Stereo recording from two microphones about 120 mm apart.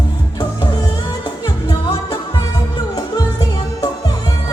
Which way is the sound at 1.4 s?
40° left (ahead or behind).